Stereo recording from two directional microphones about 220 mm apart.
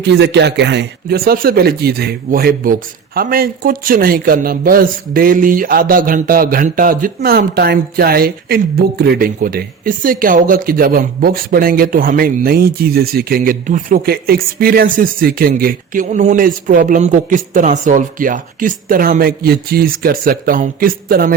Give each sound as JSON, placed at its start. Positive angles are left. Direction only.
{"t": 0.0, "sound": "a man's voice", "side_deg": -50}